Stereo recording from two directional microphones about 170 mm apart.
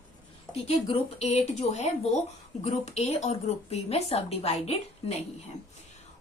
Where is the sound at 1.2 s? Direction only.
40° left (ahead or behind).